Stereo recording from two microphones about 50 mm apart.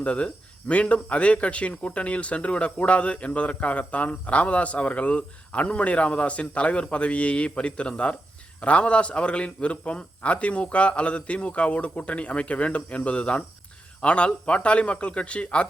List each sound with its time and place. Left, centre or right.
0.0 s speech: left